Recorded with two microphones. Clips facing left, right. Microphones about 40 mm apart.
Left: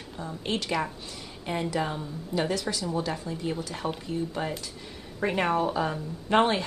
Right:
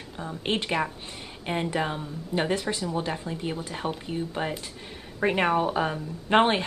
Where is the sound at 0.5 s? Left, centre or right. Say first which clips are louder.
Right 2 dB; right.